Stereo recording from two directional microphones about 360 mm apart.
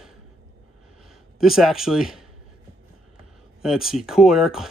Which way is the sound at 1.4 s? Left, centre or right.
Centre.